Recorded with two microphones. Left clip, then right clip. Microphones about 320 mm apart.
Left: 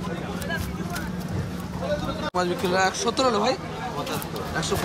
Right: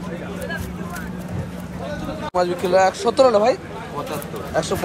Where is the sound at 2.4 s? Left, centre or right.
Centre.